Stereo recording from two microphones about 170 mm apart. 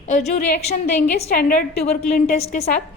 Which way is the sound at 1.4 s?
60° left (ahead or behind).